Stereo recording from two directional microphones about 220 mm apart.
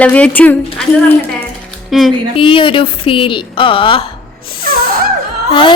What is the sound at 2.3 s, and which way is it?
A woman's voice, 25° left (ahead or behind).